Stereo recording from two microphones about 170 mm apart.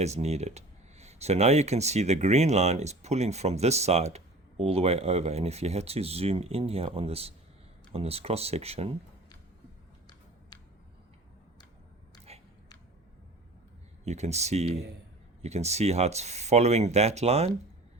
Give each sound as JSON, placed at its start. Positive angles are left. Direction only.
{"t": 0.0, "sound": "speech", "side_deg": -40}
{"t": 14.0, "sound": "speech", "side_deg": -40}